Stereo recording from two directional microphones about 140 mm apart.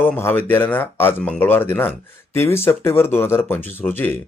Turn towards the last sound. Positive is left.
turn(degrees=15)  # may be behind; listen again after turning